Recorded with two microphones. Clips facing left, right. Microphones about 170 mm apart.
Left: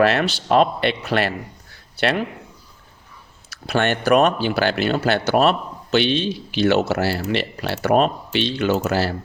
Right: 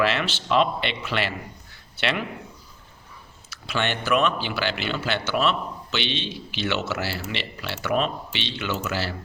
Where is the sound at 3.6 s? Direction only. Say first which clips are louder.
Left 7 dB; 45° left (ahead or behind).